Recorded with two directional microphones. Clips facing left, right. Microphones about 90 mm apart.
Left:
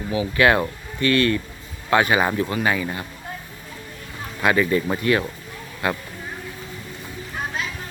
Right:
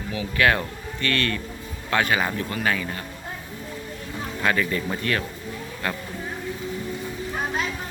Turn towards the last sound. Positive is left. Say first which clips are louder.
# left 3 dB
turn(degrees=15)  # may be behind; listen again after turning